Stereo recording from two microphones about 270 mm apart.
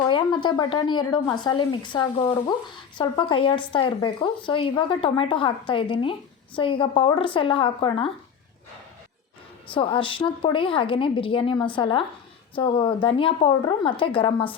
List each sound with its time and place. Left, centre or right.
0.1 s speech: centre
9.7 s a woman's voice: centre